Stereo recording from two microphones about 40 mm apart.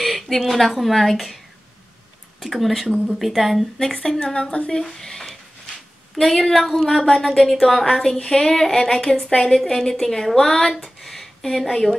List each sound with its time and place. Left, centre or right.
0.0 s a woman's voice: centre
2.4 s speech: centre
3.9 s a woman's voice: centre
11.0 s a sound: centre